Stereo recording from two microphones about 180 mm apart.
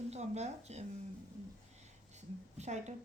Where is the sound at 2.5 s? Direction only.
40° right (ahead or behind).